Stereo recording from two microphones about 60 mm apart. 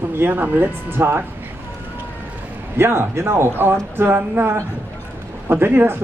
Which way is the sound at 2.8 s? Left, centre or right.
Right.